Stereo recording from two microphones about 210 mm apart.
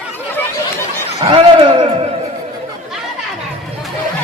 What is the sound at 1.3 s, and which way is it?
Speech, 25° right (ahead or behind).